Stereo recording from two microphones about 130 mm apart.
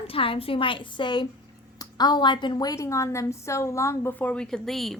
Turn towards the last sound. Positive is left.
turn(degrees=0)  # may be behind; listen again after turning